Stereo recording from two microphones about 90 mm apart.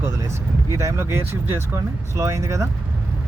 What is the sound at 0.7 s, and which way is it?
Speech, 35° right (ahead or behind).